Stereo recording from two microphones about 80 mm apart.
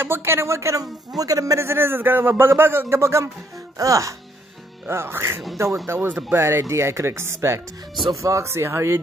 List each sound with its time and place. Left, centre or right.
0.0 s a man's voice: right
4.8 s a man's voice: right